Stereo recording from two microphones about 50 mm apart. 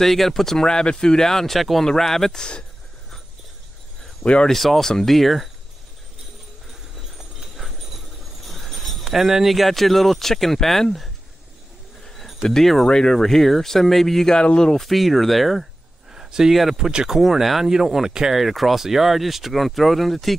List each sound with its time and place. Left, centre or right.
0.0 s speech: centre
4.5 s speech: centre
8.5 s speech: centre
12.1 s cricket: centre
12.4 s speech: centre
14.9 s speech: centre
16.1 s speech: centre